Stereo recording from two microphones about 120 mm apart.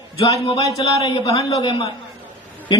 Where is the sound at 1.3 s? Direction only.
30° left (ahead or behind).